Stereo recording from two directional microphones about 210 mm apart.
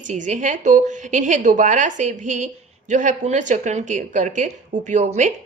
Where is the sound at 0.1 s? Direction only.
35° right (ahead or behind).